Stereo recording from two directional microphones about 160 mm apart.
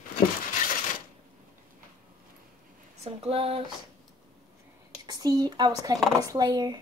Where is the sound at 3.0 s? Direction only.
40° right (ahead or behind).